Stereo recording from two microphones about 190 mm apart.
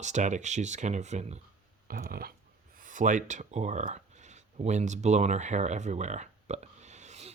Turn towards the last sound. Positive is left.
turn(degrees=-35)  # may be behind; listen again after turning